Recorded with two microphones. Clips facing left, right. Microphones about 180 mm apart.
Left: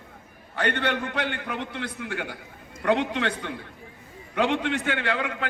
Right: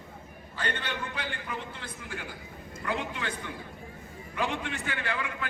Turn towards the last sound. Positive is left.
turn(degrees=75)  # may be behind; listen again after turning